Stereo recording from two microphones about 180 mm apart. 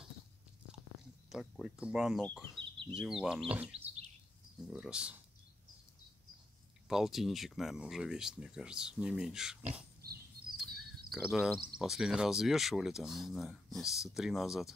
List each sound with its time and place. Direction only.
1.3 s speech: centre (ahead or behind)
6.9 s speech: centre (ahead or behind)
11.1 s speech: centre (ahead or behind)